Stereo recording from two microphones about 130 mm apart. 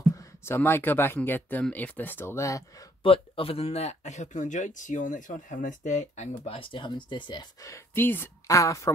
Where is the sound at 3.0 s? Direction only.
45° left (ahead or behind); by 8.9 s 25° left (ahead or behind).